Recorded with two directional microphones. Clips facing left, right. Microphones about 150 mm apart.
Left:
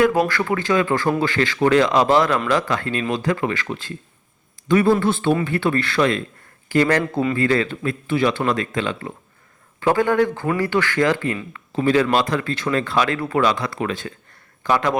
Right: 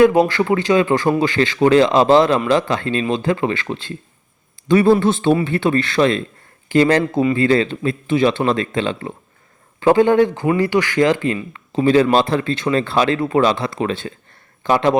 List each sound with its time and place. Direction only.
0.0 s speech: 20° right (ahead or behind)